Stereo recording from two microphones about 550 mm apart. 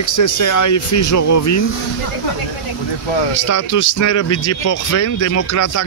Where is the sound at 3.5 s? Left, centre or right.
Left.